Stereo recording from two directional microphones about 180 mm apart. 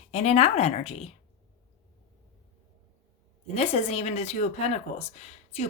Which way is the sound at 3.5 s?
35° left (ahead or behind).